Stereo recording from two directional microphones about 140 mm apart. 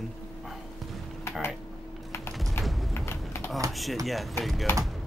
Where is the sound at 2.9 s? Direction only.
20° left (ahead or behind).